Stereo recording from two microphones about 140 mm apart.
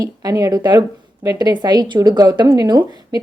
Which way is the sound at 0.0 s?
25° right (ahead or behind).